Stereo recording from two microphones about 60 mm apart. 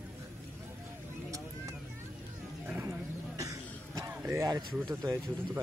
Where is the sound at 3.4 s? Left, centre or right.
Right.